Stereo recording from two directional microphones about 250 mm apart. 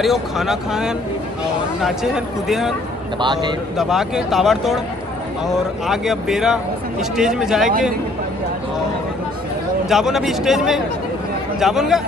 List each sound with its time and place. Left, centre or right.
0.0 s speech: centre
3.2 s speech: centre
3.7 s speech: centre
9.8 s speech: centre